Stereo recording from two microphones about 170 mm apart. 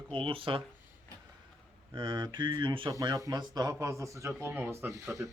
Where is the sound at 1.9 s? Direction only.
30° right (ahead or behind).